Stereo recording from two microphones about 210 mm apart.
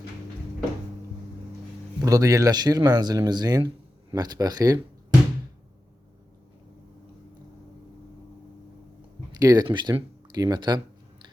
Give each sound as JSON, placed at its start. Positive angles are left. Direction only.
{"t": 2.0, "sound": "speech", "side_deg": -15}
{"t": 9.4, "sound": "speech", "side_deg": -20}